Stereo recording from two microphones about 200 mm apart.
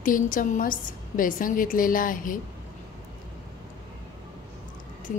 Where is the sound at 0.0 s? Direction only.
40° left (ahead or behind).